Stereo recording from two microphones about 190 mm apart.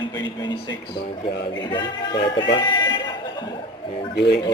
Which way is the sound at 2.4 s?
25° left (ahead or behind).